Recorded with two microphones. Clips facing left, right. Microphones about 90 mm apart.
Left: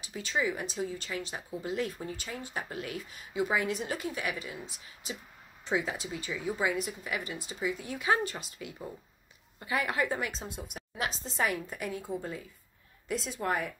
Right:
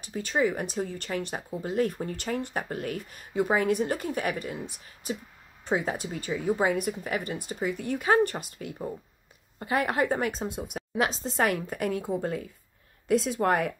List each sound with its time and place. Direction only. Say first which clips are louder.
0.0 s speech: right 5 dB; 50° right (ahead or behind)
10.5 s a woman's voice: right 9 dB; 65° right (ahead or behind)